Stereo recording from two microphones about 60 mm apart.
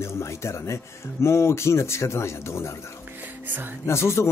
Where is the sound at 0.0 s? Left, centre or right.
Left.